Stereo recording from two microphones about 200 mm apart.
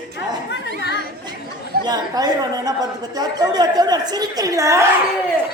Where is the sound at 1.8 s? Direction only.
20° right (ahead or behind).